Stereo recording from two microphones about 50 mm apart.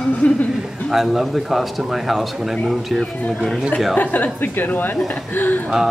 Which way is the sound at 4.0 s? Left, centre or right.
Left.